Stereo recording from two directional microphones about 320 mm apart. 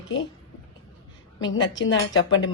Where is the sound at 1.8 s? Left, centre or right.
Left.